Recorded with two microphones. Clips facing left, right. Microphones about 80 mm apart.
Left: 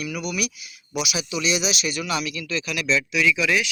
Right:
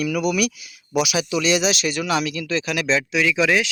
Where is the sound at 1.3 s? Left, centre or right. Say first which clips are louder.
Right 5 dB; right.